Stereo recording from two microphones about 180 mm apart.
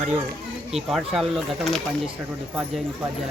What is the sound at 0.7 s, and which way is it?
Speech, centre (ahead or behind).